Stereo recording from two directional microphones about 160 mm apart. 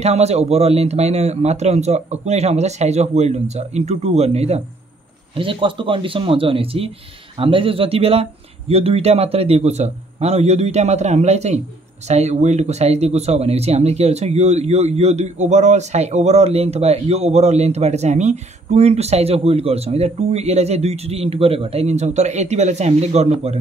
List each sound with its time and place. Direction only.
0.0 s speech: 40° right (ahead or behind)